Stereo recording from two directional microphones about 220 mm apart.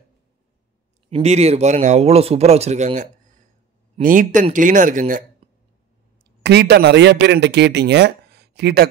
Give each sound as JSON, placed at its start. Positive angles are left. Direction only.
{"t": 1.1, "sound": "speech", "side_deg": -30}
{"t": 5.4, "sound": "a sound", "side_deg": -25}
{"t": 6.4, "sound": "speech", "side_deg": -50}